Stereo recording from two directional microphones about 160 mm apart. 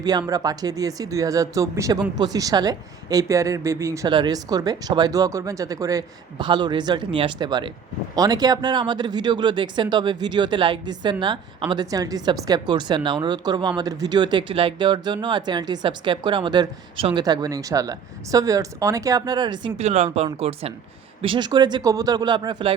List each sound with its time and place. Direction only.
0.0 s speech: 25° right (ahead or behind)
19.8 s speech: 45° right (ahead or behind); by 22.7 s 25° right (ahead or behind)